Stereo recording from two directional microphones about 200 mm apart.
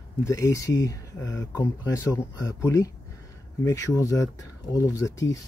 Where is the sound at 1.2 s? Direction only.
65° left (ahead or behind).